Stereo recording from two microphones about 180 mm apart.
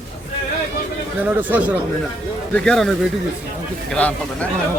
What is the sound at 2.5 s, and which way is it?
Speech, 5° left (ahead or behind).